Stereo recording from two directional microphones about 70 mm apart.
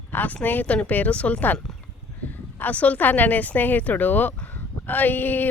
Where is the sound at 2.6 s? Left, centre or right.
Left.